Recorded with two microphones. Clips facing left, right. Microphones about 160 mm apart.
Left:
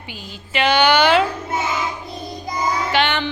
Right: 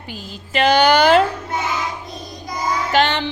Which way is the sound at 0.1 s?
40° right (ahead or behind).